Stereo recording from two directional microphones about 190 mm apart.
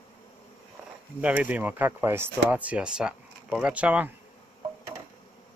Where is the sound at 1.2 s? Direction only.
10° right (ahead or behind).